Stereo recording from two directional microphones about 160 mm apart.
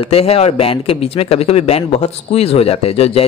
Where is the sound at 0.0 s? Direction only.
40° left (ahead or behind).